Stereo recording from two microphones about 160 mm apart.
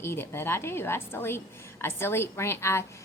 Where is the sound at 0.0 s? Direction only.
15° left (ahead or behind).